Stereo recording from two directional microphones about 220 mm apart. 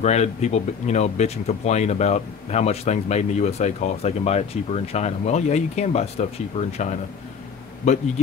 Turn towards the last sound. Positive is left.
turn(degrees=30)  # may be behind; listen again after turning